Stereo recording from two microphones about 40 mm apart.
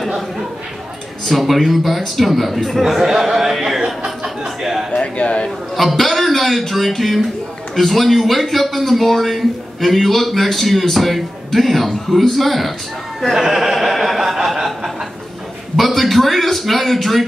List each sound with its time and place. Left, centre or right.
0.0 s a man's voice: centre
2.8 s speech: centre
4.9 s speech: left
5.8 s a man's voice: centre
15.7 s a man's voice: centre